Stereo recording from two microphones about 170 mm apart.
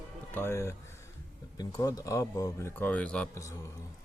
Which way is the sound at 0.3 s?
15° left (ahead or behind).